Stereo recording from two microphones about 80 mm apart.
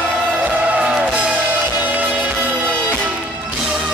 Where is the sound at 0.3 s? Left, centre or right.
Centre.